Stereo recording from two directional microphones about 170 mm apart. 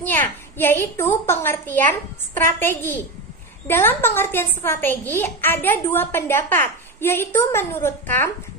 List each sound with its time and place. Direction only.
0.0 s a woman's voice: 10° left (ahead or behind)